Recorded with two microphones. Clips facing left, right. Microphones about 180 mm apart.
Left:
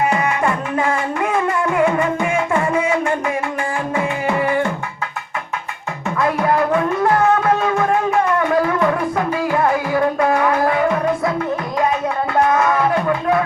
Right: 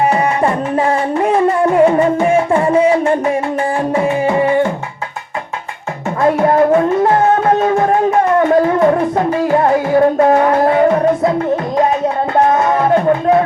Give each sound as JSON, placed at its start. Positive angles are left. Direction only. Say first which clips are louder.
{"t": 0.0, "sound": "music", "louder": "right 4 dB", "side_deg": -35}
{"t": 6.3, "sound": "a sound", "louder": "right 7 dB", "side_deg": -35}
{"t": 7.1, "sound": "music", "louder": "right 3 dB", "side_deg": -40}